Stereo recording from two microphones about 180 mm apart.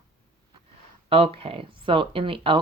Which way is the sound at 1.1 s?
30° right (ahead or behind).